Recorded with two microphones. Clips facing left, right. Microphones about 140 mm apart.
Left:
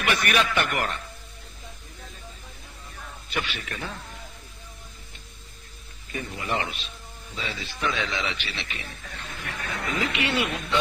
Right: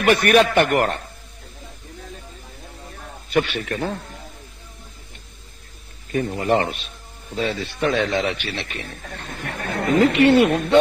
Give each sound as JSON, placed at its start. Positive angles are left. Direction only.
{"t": 0.0, "sound": "speech", "side_deg": -50}
{"t": 3.2, "sound": "speech", "side_deg": -55}
{"t": 6.1, "sound": "a man's voice", "side_deg": -50}